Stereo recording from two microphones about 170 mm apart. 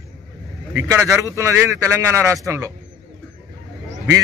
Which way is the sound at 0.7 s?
15° right (ahead or behind).